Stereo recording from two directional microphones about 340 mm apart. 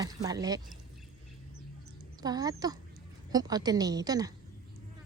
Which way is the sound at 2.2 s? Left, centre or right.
Centre.